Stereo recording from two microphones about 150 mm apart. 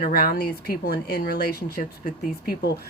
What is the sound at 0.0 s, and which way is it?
Speech, 90° left.